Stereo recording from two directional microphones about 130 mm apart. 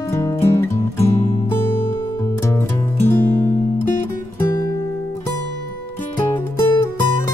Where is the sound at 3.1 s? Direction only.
15° left (ahead or behind).